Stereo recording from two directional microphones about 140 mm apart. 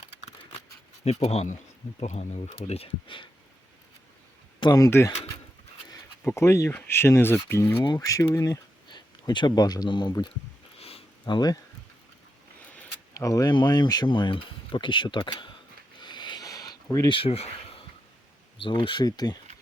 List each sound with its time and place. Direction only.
1.0 s speech: 50° left (ahead or behind)
4.7 s speech: 20° left (ahead or behind)
6.2 s speech: 20° left (ahead or behind)
10.8 s a sound: 45° left (ahead or behind)
11.3 s speech: 30° left (ahead or behind)
13.1 s speech: 25° left (ahead or behind)
16.0 s a sound: 35° left (ahead or behind)
17.1 s speech: 40° left (ahead or behind)